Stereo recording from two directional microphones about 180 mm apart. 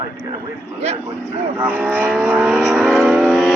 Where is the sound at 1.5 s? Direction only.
10° right (ahead or behind).